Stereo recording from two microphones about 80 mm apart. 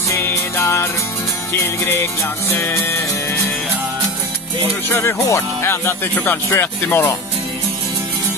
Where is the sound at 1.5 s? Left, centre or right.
Left.